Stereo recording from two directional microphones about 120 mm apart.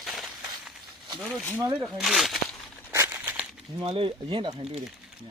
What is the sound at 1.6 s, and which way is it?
Speech, 30° right (ahead or behind).